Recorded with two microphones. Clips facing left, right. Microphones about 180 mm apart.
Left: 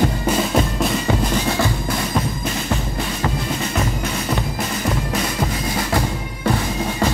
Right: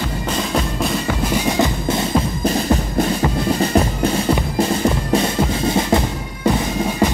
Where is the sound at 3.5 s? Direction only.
35° right (ahead or behind).